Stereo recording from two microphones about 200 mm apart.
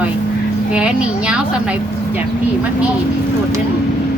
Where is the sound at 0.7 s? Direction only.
5° right (ahead or behind).